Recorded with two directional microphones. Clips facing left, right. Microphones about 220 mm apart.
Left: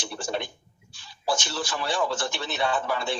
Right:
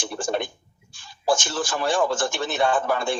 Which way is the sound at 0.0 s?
50° right (ahead or behind).